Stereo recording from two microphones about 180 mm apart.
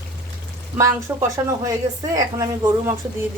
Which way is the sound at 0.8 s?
15° right (ahead or behind).